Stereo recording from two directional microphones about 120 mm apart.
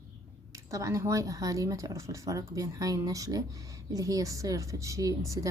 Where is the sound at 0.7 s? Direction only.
25° right (ahead or behind).